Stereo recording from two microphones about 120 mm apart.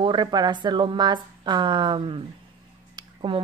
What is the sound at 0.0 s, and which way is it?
A woman's voice, 40° right (ahead or behind).